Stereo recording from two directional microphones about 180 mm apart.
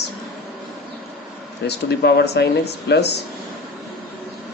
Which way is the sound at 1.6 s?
65° left (ahead or behind).